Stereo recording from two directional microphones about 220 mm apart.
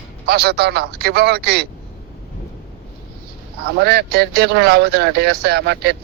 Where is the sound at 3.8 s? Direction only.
50° right (ahead or behind).